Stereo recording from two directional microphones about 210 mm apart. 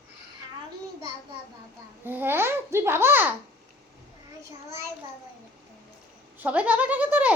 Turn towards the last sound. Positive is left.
turn(degrees=-10)  # may be behind; listen again after turning